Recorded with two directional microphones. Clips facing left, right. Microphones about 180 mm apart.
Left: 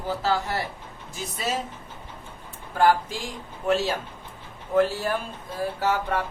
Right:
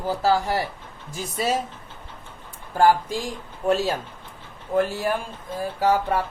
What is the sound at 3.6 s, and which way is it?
Speech, 40° right (ahead or behind).